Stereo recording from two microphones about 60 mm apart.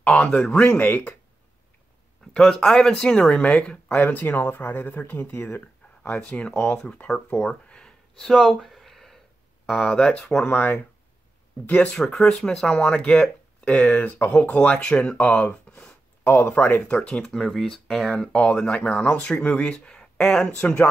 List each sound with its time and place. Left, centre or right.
0.0 s speech: centre
0.7 s speech: left
2.3 s speech: centre
4.0 s speech: left
6.0 s speech: centre
8.5 s a sound: centre
9.7 s speech: centre
10.4 s speech: left
12.0 s speech: centre